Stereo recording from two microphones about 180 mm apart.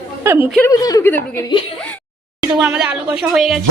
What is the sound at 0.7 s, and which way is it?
Speech, 20° left (ahead or behind).